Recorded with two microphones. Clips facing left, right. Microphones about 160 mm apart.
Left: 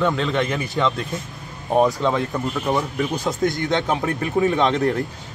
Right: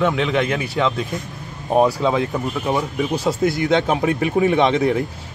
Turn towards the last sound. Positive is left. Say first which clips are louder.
# right 3 dB
turn(degrees=-5)  # may be behind; listen again after turning